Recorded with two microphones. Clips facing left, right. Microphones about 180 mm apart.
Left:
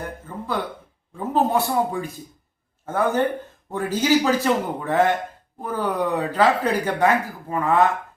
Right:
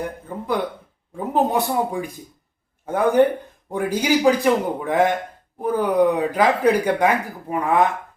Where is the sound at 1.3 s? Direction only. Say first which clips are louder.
Even; 15° right (ahead or behind).